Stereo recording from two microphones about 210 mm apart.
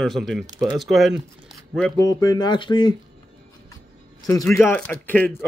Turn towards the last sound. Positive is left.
turn(degrees=5)  # may be behind; listen again after turning